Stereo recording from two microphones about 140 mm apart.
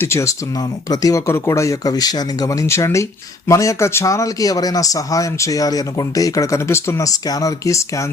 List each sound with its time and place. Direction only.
0.0 s speech: 20° left (ahead or behind)